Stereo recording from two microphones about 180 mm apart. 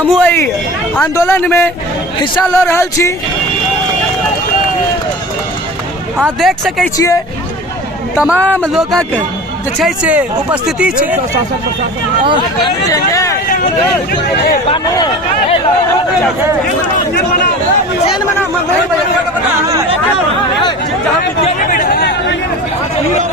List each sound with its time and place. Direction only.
0.1 s a man's voice: 10° left (ahead or behind)
6.1 s speech: 5° right (ahead or behind)
6.9 s a man's voice: 15° left (ahead or behind)
8.1 s a man's voice: 5° right (ahead or behind)
8.4 s a man's voice: 10° left (ahead or behind)
12.6 s a man's voice: 20° left (ahead or behind)
14.7 s speech: 25° left (ahead or behind)
21.7 s chatter: 55° left (ahead or behind)